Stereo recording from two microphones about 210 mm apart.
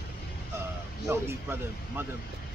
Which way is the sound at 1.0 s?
10° right (ahead or behind).